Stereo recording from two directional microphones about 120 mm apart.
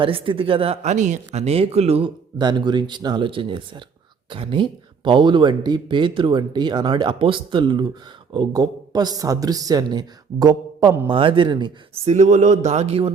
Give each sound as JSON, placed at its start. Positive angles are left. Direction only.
{"t": 0.0, "sound": "speech", "side_deg": -45}
{"t": 2.4, "sound": "speech", "side_deg": -35}
{"t": 11.0, "sound": "speech", "side_deg": -45}
{"t": 11.9, "sound": "speech", "side_deg": -70}